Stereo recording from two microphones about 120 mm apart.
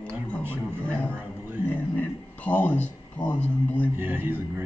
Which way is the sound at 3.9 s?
15° right (ahead or behind).